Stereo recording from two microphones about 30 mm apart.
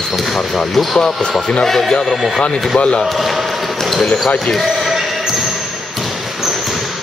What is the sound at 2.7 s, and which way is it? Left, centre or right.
Speech, left.